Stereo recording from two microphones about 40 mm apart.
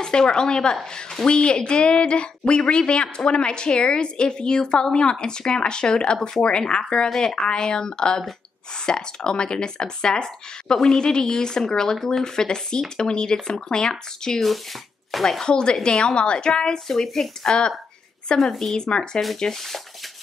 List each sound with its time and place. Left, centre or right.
0.0 s a woman's voice: centre
7.1 s speech: centre
7.3 s a woman's voice: centre
15.0 s speech: centre
15.4 s a woman's voice: left; by 19.8 s centre